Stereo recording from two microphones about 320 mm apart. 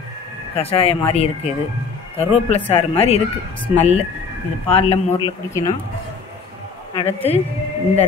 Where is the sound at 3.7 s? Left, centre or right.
Centre.